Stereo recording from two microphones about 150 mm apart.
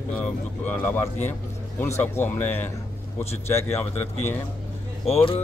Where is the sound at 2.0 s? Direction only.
10° left (ahead or behind).